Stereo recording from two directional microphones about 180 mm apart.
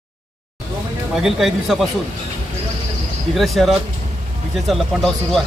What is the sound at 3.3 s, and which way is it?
Speech, centre (ahead or behind).